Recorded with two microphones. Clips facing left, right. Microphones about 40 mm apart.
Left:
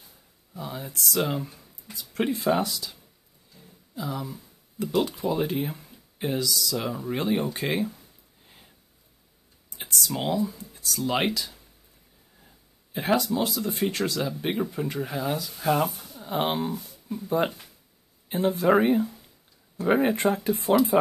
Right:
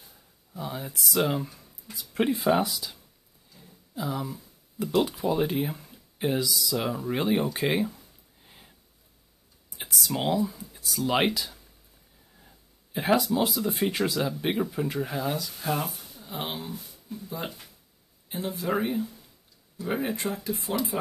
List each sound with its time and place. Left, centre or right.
0.6 s speech: centre
1.5 s a sound: centre
2.1 s speech: centre
8.5 s a sound: centre
9.8 s speech: centre
15.9 s a sound: centre
16.2 s speech: left
18.3 s speech: left
18.7 s speech: left
20.4 s speech: left